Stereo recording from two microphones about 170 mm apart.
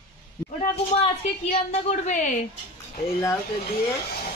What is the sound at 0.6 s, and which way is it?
A woman's voice, 40° left (ahead or behind).